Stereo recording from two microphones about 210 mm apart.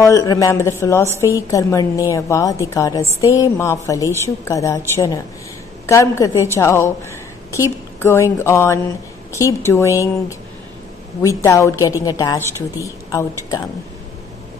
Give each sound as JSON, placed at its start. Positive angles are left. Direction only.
{"t": 0.0, "sound": "a woman's voice", "side_deg": 15}
{"t": 11.2, "sound": "a woman's voice", "side_deg": 15}